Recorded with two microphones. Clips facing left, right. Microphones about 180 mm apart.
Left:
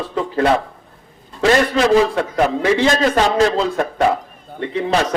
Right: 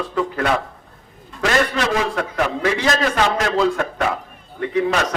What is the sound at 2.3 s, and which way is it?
A man's voice, 30° left (ahead or behind).